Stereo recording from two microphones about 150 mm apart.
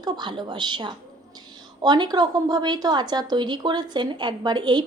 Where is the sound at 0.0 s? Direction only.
30° right (ahead or behind).